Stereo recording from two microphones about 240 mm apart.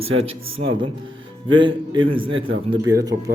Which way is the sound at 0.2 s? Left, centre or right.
Right.